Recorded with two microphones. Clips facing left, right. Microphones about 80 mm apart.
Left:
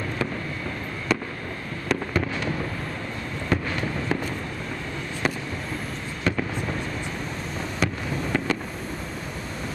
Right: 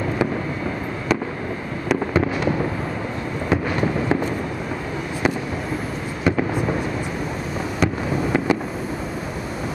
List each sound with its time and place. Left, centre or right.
1.9 s fireworks: centre
3.4 s fireworks: centre
6.2 s fireworks: centre
7.8 s fireworks: centre